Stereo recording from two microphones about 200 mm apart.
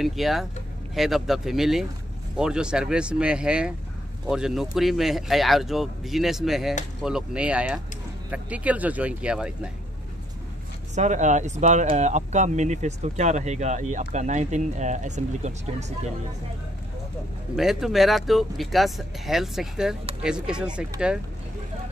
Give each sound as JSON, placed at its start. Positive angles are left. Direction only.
{"t": 0.0, "sound": "speech", "side_deg": 0}
{"t": 11.0, "sound": "speech", "side_deg": -35}
{"t": 17.6, "sound": "speech", "side_deg": 0}